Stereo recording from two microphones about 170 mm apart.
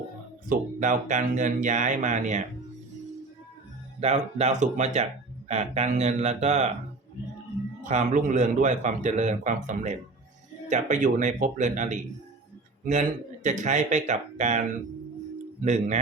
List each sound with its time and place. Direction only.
0.4 s speech: 50° right (ahead or behind)
4.0 s speech: 40° right (ahead or behind)
7.9 s speech: 45° right (ahead or behind)
15.6 s speech: 45° right (ahead or behind)